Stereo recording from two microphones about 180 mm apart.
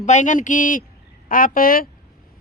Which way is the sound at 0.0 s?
40° left (ahead or behind).